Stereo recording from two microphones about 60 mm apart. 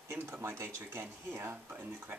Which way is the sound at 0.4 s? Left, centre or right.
Right.